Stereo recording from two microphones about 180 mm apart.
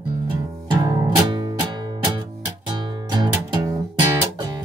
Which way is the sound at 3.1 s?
25° right (ahead or behind).